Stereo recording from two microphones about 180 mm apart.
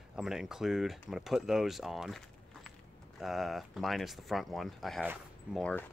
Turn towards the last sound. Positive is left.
turn(degrees=5)  # may be behind; listen again after turning